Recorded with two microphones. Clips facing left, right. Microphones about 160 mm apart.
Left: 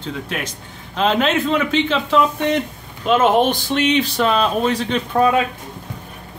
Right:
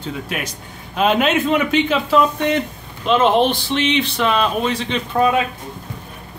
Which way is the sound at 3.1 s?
45° left (ahead or behind).